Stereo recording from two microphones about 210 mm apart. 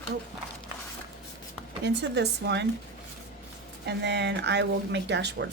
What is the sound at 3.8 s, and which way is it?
Speech, 55° right (ahead or behind).